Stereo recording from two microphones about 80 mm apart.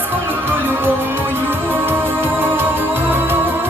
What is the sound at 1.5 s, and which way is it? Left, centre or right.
Music, right.